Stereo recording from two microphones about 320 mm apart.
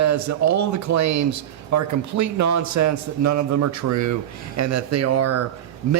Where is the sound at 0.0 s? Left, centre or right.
Right.